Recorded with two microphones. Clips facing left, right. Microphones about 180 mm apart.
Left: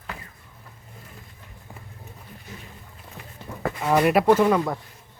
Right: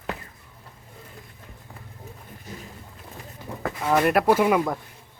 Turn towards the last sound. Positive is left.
turn(degrees=-10)  # may be behind; listen again after turning